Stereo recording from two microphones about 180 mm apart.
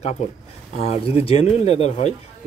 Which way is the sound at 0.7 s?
35° left (ahead or behind).